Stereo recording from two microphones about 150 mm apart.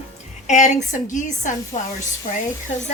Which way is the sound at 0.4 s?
50° left (ahead or behind).